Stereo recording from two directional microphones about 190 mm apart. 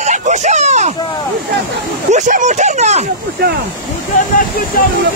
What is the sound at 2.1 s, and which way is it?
Speech, 40° right (ahead or behind).